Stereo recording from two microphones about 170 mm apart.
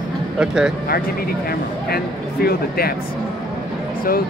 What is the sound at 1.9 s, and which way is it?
Speech, 65° left (ahead or behind).